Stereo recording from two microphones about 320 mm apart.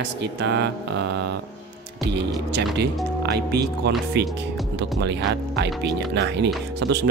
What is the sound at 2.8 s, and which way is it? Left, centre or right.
Speech, right.